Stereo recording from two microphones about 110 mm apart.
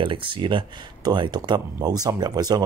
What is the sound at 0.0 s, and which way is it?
Speech, 50° right (ahead or behind).